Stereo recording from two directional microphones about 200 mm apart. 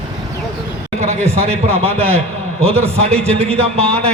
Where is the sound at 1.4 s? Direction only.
30° right (ahead or behind).